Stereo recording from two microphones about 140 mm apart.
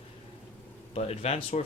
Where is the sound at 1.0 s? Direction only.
50° left (ahead or behind).